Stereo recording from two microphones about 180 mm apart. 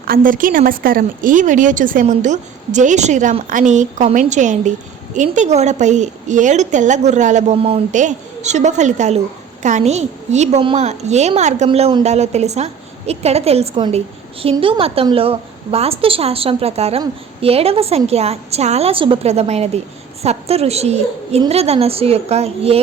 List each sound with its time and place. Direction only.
0.1 s a woman's voice: 50° right (ahead or behind); by 22.8 s 35° right (ahead or behind)